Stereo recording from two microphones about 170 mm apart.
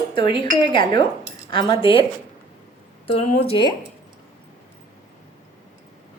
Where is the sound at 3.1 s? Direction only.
35° left (ahead or behind).